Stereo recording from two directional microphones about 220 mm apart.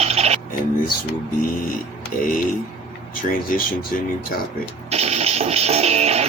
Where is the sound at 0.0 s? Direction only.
30° right (ahead or behind).